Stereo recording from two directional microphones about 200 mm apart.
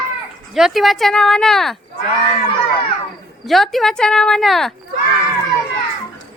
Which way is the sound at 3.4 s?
Centre (ahead or behind).